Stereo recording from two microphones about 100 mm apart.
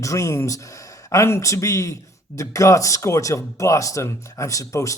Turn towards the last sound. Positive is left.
turn(degrees=35)  # may be behind; listen again after turning